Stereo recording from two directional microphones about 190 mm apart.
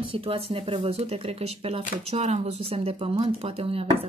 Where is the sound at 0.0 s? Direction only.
30° right (ahead or behind).